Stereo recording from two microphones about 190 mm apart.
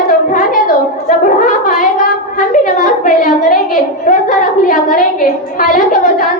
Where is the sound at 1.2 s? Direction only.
45° left (ahead or behind).